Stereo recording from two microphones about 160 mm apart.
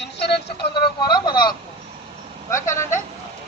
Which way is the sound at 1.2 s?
25° left (ahead or behind).